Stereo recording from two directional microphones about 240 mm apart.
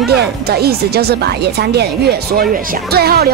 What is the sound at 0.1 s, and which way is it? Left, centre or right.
A woman's voice, right.